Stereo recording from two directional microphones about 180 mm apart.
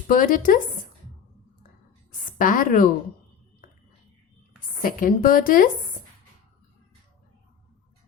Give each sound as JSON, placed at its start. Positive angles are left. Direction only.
{"t": 0.1, "sound": "a woman's voice", "side_deg": 50}
{"t": 2.4, "sound": "a woman's voice", "side_deg": 50}
{"t": 4.8, "sound": "a woman's voice", "side_deg": 50}